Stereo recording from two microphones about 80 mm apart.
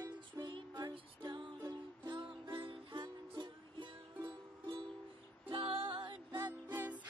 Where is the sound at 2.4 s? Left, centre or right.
Right.